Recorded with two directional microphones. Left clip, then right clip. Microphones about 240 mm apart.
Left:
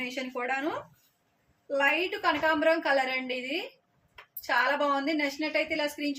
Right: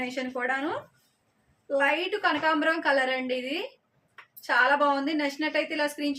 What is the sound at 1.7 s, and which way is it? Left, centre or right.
A woman's voice, centre.